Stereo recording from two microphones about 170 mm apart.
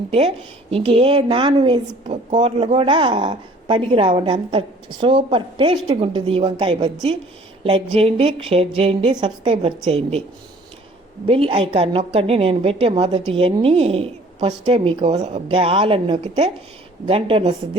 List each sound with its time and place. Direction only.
0.1 s a woman's voice: 35° right (ahead or behind)
11.3 s a woman's voice: 35° right (ahead or behind)